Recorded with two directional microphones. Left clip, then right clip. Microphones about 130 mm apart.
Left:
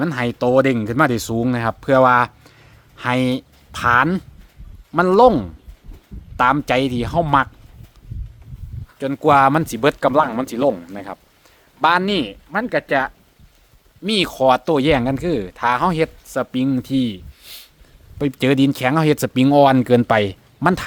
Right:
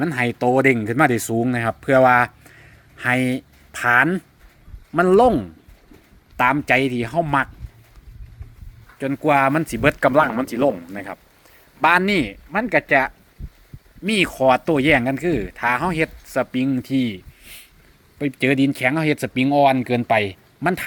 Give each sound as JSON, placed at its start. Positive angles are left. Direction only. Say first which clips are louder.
{"t": 0.0, "sound": "speech", "louder": "even", "side_deg": 10}
{"t": 6.3, "sound": "speech", "louder": "left 1 dB", "side_deg": 15}
{"t": 9.0, "sound": "speech", "louder": "left 4 dB", "side_deg": 30}
{"t": 10.0, "sound": "speech", "louder": "even", "side_deg": 10}
{"t": 12.5, "sound": "speech", "louder": "right 1 dB", "side_deg": 0}
{"t": 14.0, "sound": "speech", "louder": "left 1 dB", "side_deg": 20}
{"t": 16.6, "sound": "speech", "louder": "left 2 dB", "side_deg": 30}
{"t": 18.2, "sound": "speech", "louder": "left 2 dB", "side_deg": 40}